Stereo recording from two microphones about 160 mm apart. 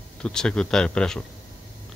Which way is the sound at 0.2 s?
5° left (ahead or behind).